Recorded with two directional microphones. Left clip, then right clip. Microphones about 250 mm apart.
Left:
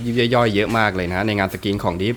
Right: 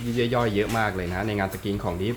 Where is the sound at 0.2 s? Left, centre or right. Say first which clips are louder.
Left 7 dB; left.